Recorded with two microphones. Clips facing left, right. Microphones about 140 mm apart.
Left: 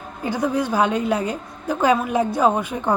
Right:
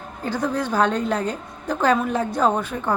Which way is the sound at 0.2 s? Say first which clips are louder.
Left 2 dB; 10° left (ahead or behind).